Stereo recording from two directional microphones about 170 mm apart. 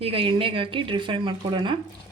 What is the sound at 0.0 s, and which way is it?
Speech, 30° right (ahead or behind).